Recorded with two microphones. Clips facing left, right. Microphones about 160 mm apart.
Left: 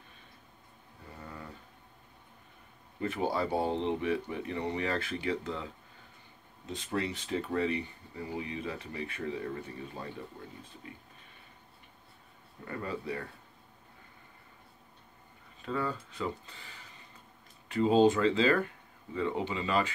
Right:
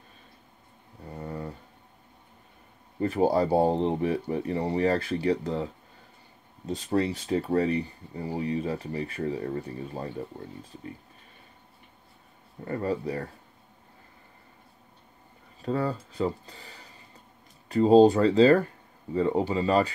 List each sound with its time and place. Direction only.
1.0 s a sound: 35° right (ahead or behind)
3.0 s speech: 40° right (ahead or behind)
12.6 s speech: 35° right (ahead or behind)
15.6 s speech: 35° right (ahead or behind)